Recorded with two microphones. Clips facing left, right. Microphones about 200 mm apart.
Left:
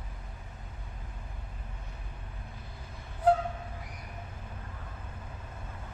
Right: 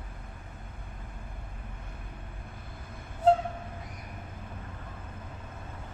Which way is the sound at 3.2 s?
25° right (ahead or behind).